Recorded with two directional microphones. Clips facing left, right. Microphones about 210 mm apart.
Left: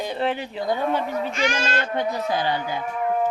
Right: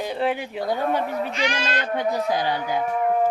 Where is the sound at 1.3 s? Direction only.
45° left (ahead or behind).